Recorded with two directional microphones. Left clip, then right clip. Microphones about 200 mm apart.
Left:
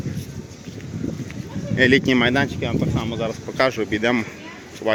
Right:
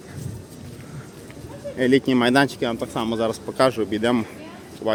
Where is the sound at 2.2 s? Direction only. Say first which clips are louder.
Right 2 dB; 30° right (ahead or behind).